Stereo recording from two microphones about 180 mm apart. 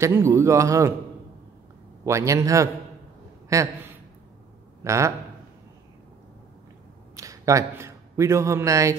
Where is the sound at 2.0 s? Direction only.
15° right (ahead or behind).